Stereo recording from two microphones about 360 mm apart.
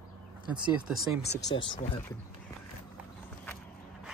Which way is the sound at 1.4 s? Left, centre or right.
Left.